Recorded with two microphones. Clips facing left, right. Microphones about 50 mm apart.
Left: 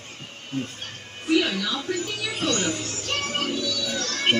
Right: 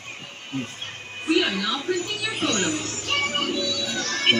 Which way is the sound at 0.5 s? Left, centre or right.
Right.